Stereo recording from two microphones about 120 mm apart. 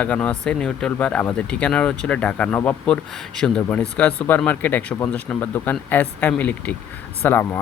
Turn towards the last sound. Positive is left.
turn(degrees=20)  # may be behind; listen again after turning